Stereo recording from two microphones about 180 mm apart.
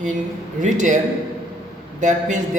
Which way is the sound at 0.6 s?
45° right (ahead or behind).